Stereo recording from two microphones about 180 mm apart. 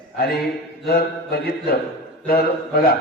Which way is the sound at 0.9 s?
60° left (ahead or behind).